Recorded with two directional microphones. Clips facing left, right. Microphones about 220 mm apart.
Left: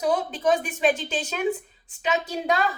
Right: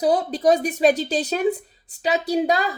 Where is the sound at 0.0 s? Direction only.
35° right (ahead or behind).